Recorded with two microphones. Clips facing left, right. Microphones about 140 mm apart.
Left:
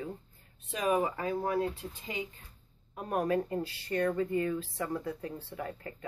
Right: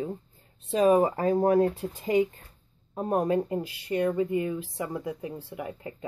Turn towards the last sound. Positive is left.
turn(degrees=-15)  # may be behind; listen again after turning